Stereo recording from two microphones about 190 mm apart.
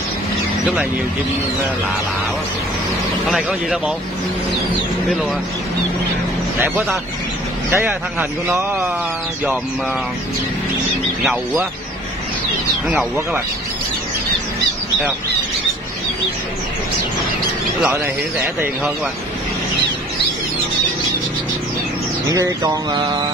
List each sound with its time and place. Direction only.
3.3 s speech: centre (ahead or behind)
6.6 s speech: 10° right (ahead or behind)
12.8 s speech: 5° right (ahead or behind)
17.8 s speech: 10° right (ahead or behind)
22.3 s a sound: 20° right (ahead or behind)